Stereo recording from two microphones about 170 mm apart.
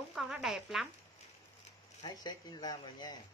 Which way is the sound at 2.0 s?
25° left (ahead or behind).